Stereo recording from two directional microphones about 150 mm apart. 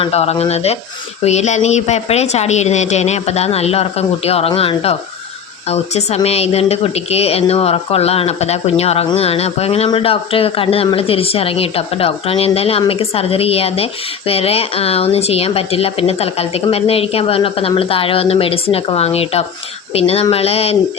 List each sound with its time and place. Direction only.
0.0 s a woman's voice: 45° left (ahead or behind)